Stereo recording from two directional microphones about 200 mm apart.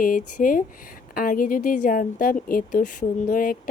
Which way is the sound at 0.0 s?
40° left (ahead or behind).